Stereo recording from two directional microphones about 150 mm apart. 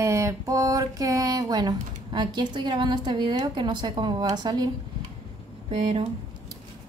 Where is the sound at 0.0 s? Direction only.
20° right (ahead or behind).